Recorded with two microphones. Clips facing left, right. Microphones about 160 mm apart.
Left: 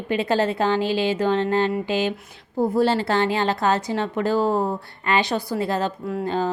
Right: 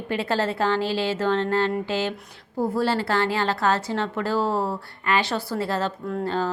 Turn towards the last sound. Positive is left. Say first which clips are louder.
# left 2 dB
turn(degrees=15)  # may be behind; listen again after turning